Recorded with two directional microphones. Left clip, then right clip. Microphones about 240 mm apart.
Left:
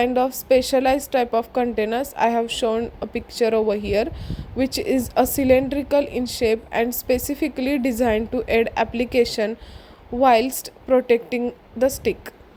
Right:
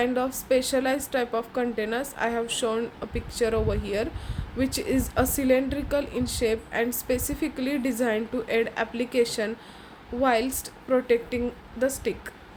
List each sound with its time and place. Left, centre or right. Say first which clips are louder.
0.0 s a woman's voice: left 6 dB; left